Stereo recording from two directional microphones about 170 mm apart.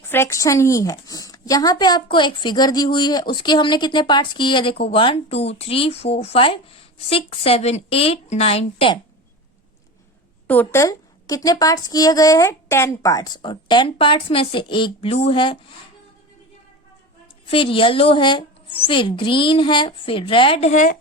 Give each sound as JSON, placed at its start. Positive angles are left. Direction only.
{"t": 0.1, "sound": "a woman's voice", "side_deg": 15}
{"t": 10.4, "sound": "a woman's voice", "side_deg": 10}
{"t": 17.4, "sound": "speech", "side_deg": 30}